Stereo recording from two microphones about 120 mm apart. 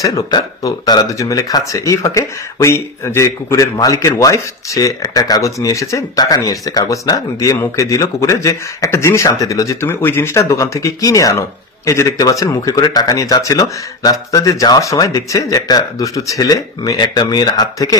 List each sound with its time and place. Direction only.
0.0 s speech: 35° left (ahead or behind)